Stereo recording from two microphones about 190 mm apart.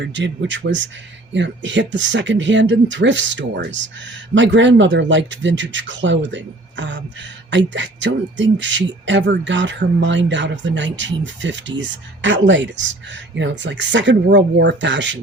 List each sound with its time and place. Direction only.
0.0 s speech: 70° right (ahead or behind)